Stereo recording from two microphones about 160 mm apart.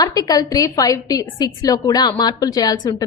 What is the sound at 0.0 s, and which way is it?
A woman's voice, 25° left (ahead or behind).